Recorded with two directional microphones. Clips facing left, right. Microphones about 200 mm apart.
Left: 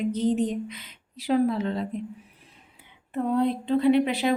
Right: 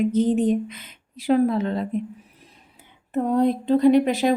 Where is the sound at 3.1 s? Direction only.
45° right (ahead or behind).